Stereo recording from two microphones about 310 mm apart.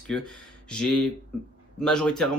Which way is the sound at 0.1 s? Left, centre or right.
Centre.